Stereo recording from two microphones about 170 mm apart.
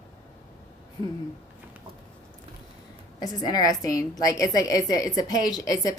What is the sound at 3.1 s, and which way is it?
A woman's voice, 25° left (ahead or behind).